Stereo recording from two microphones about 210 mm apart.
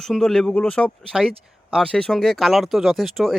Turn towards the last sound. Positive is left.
turn(degrees=0)  # may be behind; listen again after turning